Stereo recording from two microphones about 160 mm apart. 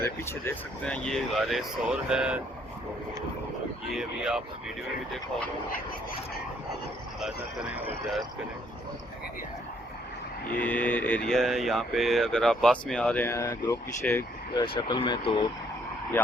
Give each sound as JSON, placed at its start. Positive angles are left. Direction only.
{"t": 0.0, "sound": "speech", "side_deg": 15}
{"t": 3.9, "sound": "speech", "side_deg": -5}
{"t": 7.2, "sound": "speech", "side_deg": -5}
{"t": 10.6, "sound": "speech", "side_deg": 10}
{"t": 14.8, "sound": "speech", "side_deg": 30}